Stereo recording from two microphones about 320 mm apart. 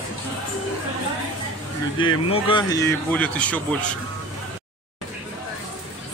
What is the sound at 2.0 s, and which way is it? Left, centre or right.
Speech, centre.